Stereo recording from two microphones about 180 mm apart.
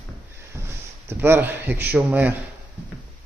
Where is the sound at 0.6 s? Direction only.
10° right (ahead or behind).